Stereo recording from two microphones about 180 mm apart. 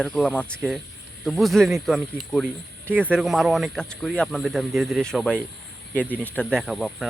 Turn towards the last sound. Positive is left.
turn(degrees=0)  # may be behind; listen again after turning